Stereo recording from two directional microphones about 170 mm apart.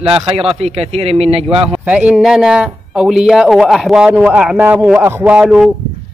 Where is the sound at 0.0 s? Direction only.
35° right (ahead or behind).